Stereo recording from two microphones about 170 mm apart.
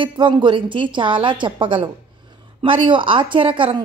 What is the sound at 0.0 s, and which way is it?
Speech, 30° right (ahead or behind).